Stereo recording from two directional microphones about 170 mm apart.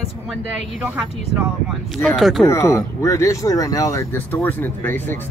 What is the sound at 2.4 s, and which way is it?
A woman's voice, 15° left (ahead or behind).